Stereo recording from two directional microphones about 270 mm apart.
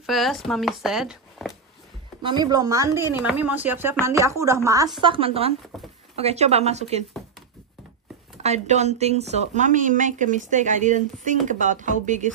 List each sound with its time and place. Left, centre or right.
0.0 s speech: centre
2.2 s a woman's voice: centre
8.4 s a woman's voice: right